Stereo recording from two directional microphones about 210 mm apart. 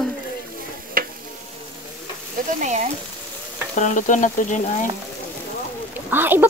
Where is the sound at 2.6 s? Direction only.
35° right (ahead or behind).